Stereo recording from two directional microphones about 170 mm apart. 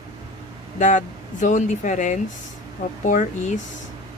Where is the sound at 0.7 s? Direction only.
45° left (ahead or behind).